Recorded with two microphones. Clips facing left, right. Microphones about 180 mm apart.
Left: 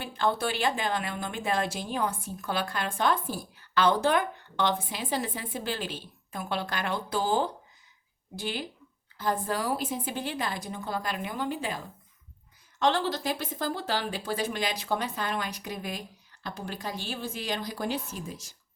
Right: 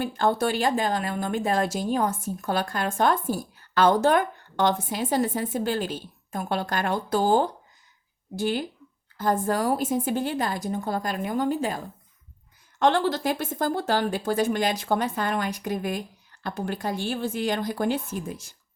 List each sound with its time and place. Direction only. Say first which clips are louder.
0.0 s a woman's voice: right 5 dB; 45° right (ahead or behind)
12.8 s a woman's voice: right 5 dB; 50° right (ahead or behind)